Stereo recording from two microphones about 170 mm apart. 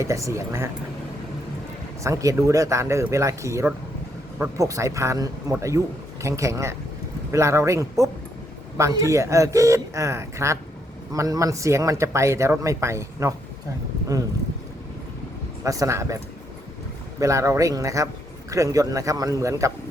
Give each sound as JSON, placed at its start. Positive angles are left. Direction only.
{"t": 0.0, "sound": "speech", "side_deg": -15}
{"t": 2.0, "sound": "speech", "side_deg": -20}
{"t": 15.6, "sound": "a man's voice", "side_deg": -20}